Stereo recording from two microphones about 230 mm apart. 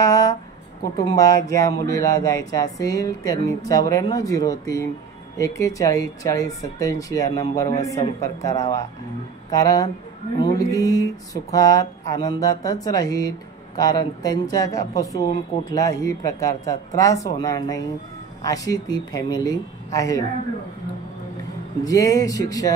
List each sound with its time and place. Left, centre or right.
0.0 s a sound: centre
0.9 s speech: centre
21.8 s speech: centre